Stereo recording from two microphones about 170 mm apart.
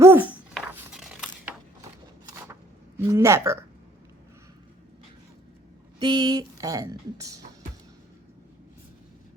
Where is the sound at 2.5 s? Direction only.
15° right (ahead or behind).